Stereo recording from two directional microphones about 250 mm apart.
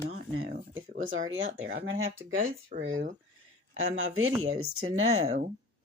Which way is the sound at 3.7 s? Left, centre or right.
Right.